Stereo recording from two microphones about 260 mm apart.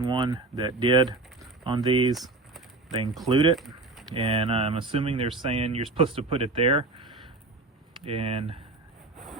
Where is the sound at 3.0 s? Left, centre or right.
Centre.